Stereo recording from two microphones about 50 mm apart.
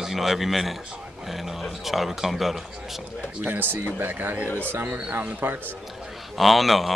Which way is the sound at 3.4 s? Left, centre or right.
Right.